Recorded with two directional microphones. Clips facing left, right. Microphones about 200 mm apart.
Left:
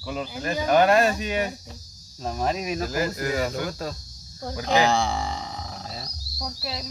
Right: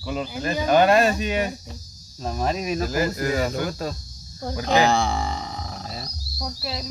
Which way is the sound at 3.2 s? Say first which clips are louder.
Right 2 dB; 45° right (ahead or behind).